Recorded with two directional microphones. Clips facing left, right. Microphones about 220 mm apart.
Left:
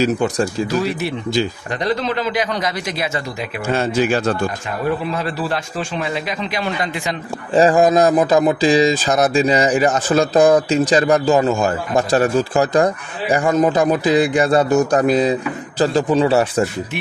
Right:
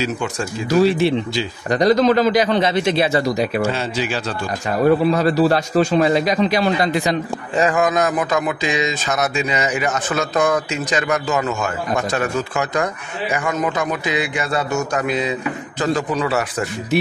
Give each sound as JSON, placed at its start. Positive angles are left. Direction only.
{"t": 0.0, "sound": "speech", "side_deg": 35}
{"t": 0.7, "sound": "speech", "side_deg": -30}
{"t": 1.7, "sound": "a man's voice", "side_deg": -40}
{"t": 3.6, "sound": "speech", "side_deg": 50}
{"t": 4.6, "sound": "a man's voice", "side_deg": -40}
{"t": 7.5, "sound": "speech", "side_deg": 30}